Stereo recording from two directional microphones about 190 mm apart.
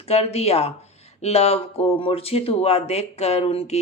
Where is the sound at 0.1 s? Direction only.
35° left (ahead or behind).